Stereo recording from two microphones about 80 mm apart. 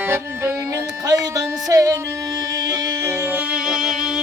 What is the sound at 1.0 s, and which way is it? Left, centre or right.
Music, right.